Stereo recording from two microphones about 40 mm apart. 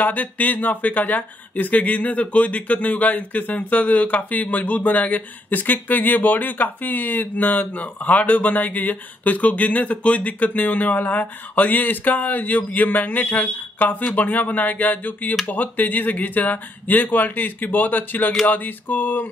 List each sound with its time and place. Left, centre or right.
0.0 s speech: left